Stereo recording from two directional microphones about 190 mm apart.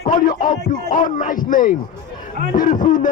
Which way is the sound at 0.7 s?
45° left (ahead or behind).